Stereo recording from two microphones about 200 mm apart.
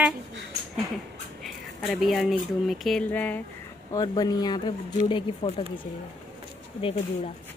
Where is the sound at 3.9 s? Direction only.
20° left (ahead or behind).